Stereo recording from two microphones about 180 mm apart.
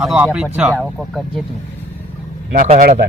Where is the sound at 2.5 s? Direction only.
45° right (ahead or behind).